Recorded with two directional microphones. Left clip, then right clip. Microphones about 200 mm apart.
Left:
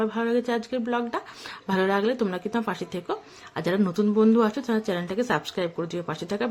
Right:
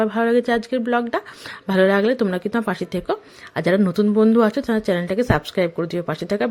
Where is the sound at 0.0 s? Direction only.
30° right (ahead or behind).